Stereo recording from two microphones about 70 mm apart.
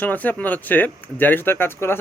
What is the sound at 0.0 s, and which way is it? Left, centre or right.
Speech, left.